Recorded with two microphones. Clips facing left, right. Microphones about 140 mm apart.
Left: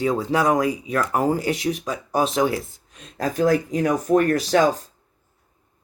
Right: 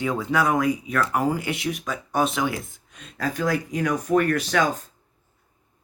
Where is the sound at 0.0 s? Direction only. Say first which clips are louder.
Left 3 dB; 35° left (ahead or behind).